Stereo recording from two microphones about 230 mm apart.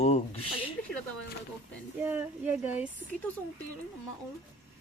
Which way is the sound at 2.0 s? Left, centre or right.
Centre.